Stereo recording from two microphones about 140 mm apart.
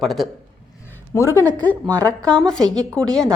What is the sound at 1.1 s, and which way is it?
Speech, 20° left (ahead or behind).